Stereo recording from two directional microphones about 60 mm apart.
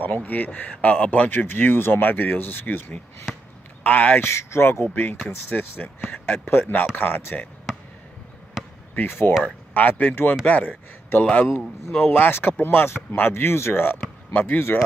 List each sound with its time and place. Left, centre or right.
0.0 s speech: left
3.8 s a man's voice: left
4.2 s speech: left
4.9 s a man's voice: left
8.9 s a man's voice: left
13.8 s speech: left